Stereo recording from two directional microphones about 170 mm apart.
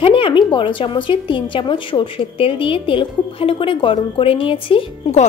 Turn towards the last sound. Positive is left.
turn(degrees=35)  # may be behind; listen again after turning